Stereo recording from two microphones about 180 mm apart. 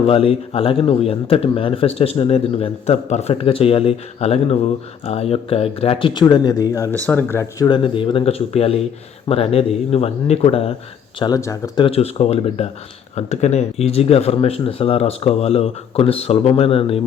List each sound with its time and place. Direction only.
0.0 s a man's voice: 30° left (ahead or behind); by 7.7 s 15° left (ahead or behind)
7.7 s a man's voice: 30° left (ahead or behind)
11.2 s a man's voice: 20° left (ahead or behind)